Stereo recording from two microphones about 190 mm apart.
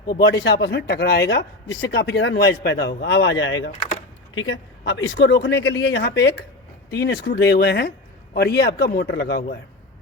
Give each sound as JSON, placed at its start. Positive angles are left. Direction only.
{"t": 0.1, "sound": "speech", "side_deg": 60}